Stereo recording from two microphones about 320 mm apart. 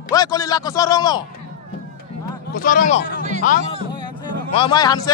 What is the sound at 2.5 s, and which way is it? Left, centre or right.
Speech, left.